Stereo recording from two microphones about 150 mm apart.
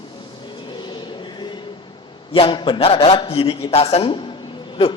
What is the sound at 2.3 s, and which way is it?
A woman's voice, 35° left (ahead or behind).